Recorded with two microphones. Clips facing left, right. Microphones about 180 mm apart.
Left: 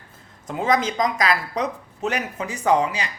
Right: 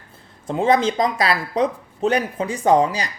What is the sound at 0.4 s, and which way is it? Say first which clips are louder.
Speech: right 4 dB; 30° right (ahead or behind).